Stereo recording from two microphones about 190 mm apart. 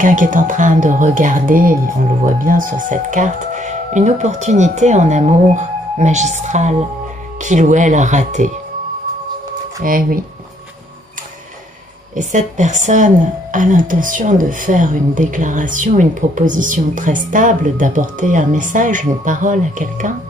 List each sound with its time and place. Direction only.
0.0 s a woman's voice: 40° right (ahead or behind)
9.8 s a woman's voice: 45° right (ahead or behind)
12.2 s a woman's voice: 40° right (ahead or behind)